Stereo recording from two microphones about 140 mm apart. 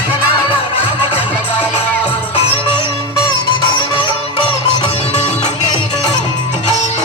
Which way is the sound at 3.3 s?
35° left (ahead or behind).